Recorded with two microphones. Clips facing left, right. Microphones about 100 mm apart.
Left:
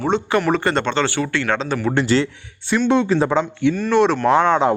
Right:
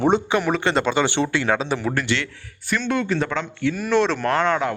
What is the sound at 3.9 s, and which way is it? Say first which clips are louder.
Speech: left 4 dB; 10° left (ahead or behind).